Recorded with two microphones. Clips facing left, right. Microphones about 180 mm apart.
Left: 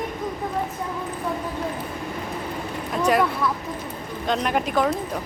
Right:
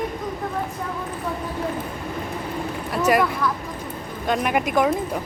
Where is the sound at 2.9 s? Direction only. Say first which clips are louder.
Right 1 dB; 5° right (ahead or behind).